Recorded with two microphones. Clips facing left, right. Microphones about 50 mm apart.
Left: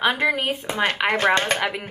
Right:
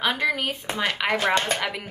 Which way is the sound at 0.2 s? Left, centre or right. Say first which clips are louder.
Left 3 dB; left.